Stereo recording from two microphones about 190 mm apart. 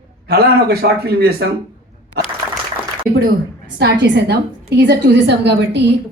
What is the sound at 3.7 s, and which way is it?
A woman's voice, 65° right (ahead or behind).